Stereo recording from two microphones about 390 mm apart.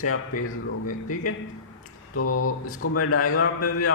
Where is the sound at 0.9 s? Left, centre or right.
Centre.